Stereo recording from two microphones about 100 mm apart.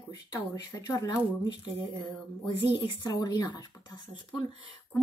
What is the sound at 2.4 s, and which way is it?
Speech, 40° left (ahead or behind).